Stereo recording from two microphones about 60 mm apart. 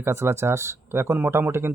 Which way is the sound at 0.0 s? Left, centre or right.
Right.